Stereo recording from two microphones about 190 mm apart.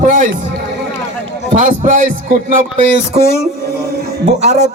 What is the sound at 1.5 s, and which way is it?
Speech, 45° right (ahead or behind).